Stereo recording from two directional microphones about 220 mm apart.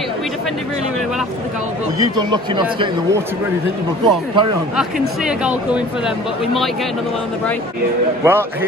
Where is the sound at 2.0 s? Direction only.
20° right (ahead or behind).